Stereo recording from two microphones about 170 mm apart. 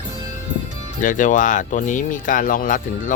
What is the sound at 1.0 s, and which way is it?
Speech, 50° left (ahead or behind).